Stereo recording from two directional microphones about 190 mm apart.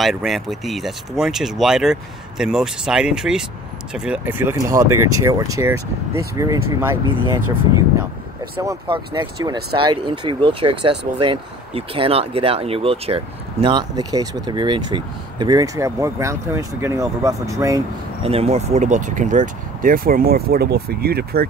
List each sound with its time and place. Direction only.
0.0 s speech: centre (ahead or behind)
8.5 s speech: 25° right (ahead or behind)
18.2 s speech: 30° right (ahead or behind); by 21.5 s 55° right (ahead or behind)